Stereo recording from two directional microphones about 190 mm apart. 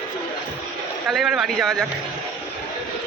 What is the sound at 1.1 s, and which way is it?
Speech, centre (ahead or behind).